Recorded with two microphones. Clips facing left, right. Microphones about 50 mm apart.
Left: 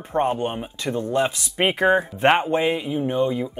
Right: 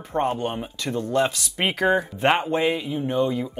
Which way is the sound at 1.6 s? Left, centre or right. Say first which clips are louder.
Left 2 dB; left.